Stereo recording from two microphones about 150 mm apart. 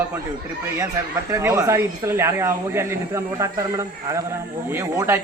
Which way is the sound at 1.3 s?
20° right (ahead or behind).